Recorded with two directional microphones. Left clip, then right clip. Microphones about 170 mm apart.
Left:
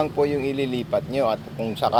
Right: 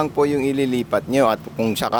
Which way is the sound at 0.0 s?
45° right (ahead or behind).